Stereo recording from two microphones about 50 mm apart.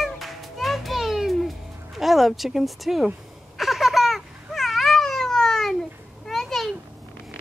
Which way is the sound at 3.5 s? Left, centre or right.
Centre.